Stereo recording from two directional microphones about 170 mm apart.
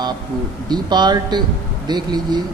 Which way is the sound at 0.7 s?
25° right (ahead or behind).